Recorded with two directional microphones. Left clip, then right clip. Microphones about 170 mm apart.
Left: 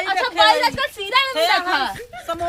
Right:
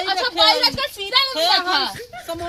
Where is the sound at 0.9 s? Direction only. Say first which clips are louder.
Even; centre (ahead or behind).